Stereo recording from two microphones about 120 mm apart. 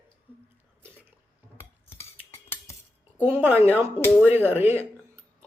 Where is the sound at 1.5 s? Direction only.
20° left (ahead or behind).